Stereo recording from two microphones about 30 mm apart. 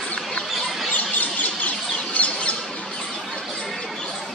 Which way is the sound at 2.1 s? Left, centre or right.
Left.